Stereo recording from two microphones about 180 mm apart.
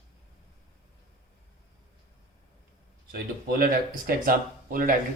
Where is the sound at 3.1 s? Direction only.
55° right (ahead or behind).